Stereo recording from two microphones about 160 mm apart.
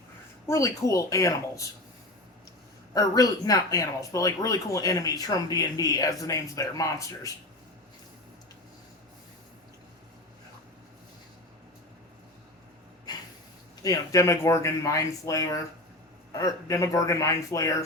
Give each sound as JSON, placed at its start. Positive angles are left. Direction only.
{"t": 0.4, "sound": "speech", "side_deg": 20}
{"t": 2.9, "sound": "speech", "side_deg": 25}
{"t": 13.8, "sound": "speech", "side_deg": 20}